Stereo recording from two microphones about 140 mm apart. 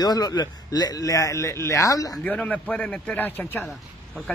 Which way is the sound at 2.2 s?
10° left (ahead or behind).